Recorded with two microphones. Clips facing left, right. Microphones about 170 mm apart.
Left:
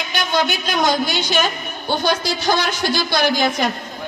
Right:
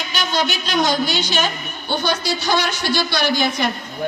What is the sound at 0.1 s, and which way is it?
Speech, 50° left (ahead or behind).